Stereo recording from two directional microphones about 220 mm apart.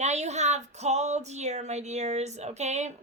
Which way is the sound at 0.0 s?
30° right (ahead or behind).